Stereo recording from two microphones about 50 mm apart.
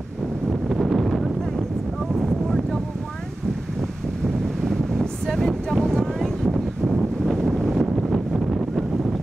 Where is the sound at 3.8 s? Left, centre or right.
Centre.